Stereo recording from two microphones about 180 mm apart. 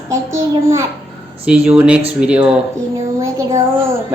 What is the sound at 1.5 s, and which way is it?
Speech, 5° right (ahead or behind).